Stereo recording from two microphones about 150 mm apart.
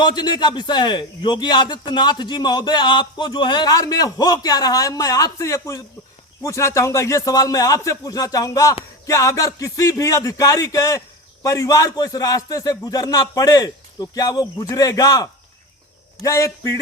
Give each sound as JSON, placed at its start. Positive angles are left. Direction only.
{"t": 0.0, "sound": "a man's voice", "side_deg": 30}